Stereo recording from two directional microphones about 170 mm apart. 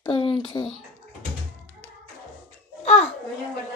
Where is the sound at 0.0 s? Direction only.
30° left (ahead or behind).